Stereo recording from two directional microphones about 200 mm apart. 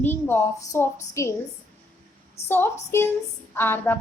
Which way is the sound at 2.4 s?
30° left (ahead or behind).